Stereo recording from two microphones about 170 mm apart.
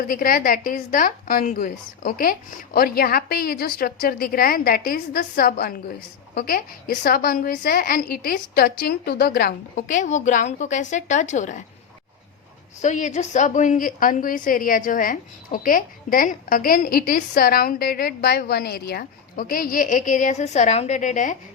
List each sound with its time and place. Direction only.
0.0 s a woman's voice: 55° left (ahead or behind)
12.8 s a woman's voice: 45° left (ahead or behind)